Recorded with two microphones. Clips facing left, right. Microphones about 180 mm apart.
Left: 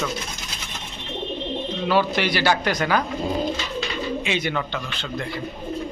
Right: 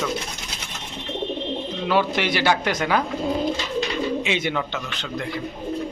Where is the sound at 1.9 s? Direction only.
20° right (ahead or behind).